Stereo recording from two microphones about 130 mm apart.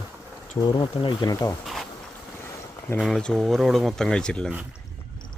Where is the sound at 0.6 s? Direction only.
35° left (ahead or behind).